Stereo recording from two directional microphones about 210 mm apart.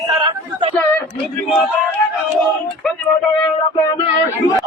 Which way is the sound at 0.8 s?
5° left (ahead or behind).